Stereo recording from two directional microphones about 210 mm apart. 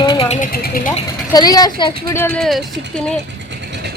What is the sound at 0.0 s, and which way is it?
Vehicle, 20° left (ahead or behind).